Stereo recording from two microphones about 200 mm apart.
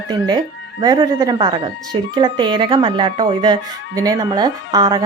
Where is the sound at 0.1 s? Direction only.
20° right (ahead or behind).